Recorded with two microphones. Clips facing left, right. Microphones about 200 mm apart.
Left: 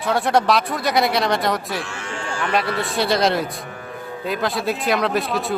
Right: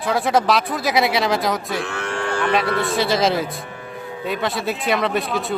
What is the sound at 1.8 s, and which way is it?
Cattle, 60° right (ahead or behind).